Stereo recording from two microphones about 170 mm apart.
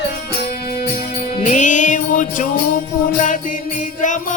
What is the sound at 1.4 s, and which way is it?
Music, 45° left (ahead or behind).